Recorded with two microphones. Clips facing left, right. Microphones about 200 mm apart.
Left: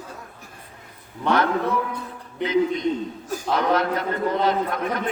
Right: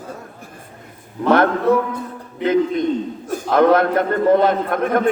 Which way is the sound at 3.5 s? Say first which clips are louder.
Right 8 dB; 55° right (ahead or behind).